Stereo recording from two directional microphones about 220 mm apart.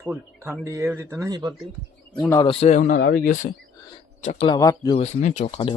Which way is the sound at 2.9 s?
45° left (ahead or behind).